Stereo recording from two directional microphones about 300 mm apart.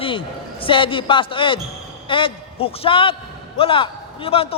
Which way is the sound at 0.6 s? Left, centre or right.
Centre.